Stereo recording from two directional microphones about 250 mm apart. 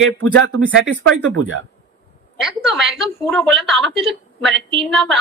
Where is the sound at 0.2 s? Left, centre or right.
Right.